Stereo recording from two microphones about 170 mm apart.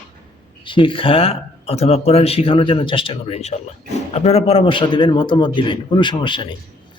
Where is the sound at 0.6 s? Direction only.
30° left (ahead or behind).